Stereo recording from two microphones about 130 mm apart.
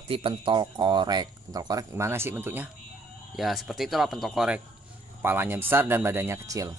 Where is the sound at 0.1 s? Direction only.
40° right (ahead or behind); by 2.7 s 15° right (ahead or behind).